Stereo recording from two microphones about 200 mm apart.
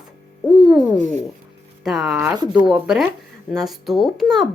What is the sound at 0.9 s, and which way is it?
Speech, 35° right (ahead or behind).